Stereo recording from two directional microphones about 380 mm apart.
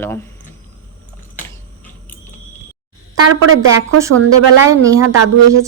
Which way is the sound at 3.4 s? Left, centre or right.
Right.